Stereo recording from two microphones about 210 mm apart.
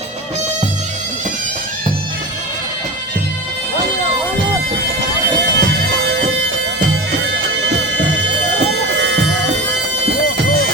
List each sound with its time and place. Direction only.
5.5 s bagpipes: 50° right (ahead or behind)